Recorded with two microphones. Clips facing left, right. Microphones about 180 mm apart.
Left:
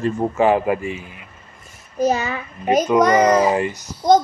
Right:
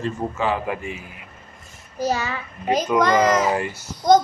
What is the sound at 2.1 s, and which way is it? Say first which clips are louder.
A child's voice: left 3 dB; 20° left (ahead or behind).